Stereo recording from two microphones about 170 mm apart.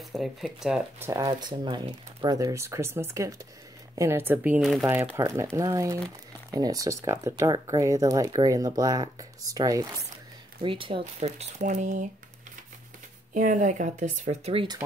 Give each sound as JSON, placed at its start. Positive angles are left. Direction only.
{"t": 0.1, "sound": "speech", "side_deg": 0}
{"t": 0.9, "sound": "speech", "side_deg": -15}
{"t": 4.8, "sound": "speech", "side_deg": -15}
{"t": 13.3, "sound": "speech", "side_deg": -50}